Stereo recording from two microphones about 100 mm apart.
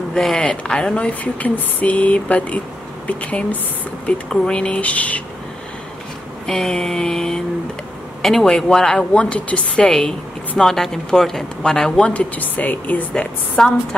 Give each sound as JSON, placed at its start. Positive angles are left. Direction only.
{"t": 0.1, "sound": "a woman's voice", "side_deg": 5}
{"t": 6.4, "sound": "a sound", "side_deg": 5}
{"t": 8.2, "sound": "a woman's voice", "side_deg": 0}